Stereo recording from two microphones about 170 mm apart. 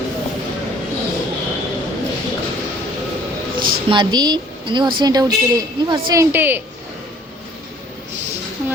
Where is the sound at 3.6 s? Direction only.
30° right (ahead or behind); by 6.6 s 10° right (ahead or behind).